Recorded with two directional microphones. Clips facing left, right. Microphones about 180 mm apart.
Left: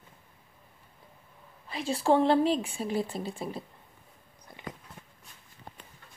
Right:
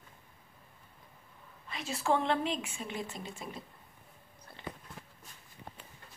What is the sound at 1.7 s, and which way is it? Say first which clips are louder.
A woman's voice: left 6 dB; 30° left (ahead or behind).